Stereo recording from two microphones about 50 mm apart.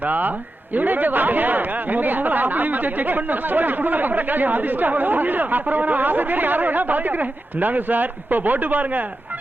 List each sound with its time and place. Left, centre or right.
0.0 s speech: right